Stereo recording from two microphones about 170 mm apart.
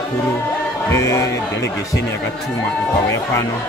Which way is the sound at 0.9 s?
15° left (ahead or behind).